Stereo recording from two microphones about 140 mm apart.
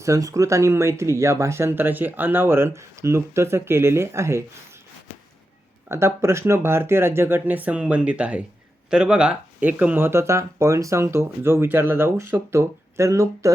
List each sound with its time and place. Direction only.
0.0 s speech: 25° right (ahead or behind)
5.9 s speech: 20° right (ahead or behind)